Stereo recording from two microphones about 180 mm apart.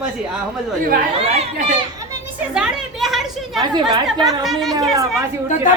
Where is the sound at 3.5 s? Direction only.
25° right (ahead or behind).